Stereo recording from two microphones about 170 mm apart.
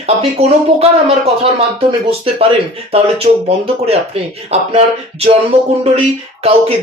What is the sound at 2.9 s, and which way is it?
Speech, 35° right (ahead or behind).